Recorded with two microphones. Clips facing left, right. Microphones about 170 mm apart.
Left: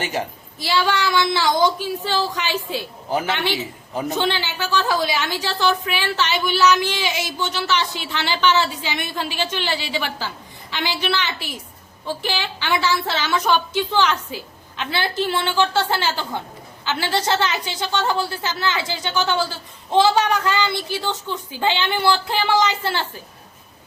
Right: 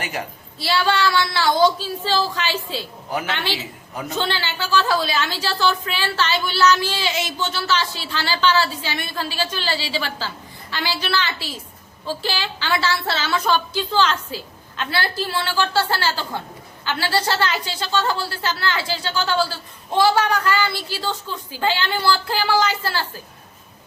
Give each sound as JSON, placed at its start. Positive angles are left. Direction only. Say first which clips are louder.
{"t": 0.0, "sound": "a woman's voice", "louder": "left 3 dB", "side_deg": 25}